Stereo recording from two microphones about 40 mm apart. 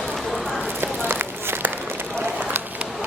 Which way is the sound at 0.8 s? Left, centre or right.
Right.